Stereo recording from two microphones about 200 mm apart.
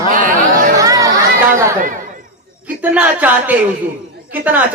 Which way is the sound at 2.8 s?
10° right (ahead or behind).